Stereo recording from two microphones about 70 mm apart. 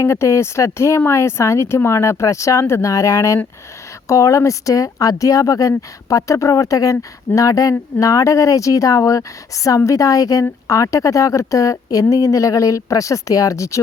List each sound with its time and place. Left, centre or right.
0.0 s speech: left